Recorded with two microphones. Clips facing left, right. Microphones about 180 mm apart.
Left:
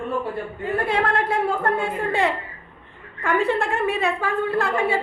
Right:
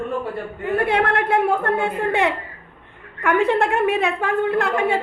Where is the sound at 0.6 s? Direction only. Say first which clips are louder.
Right 3 dB; 65° right (ahead or behind).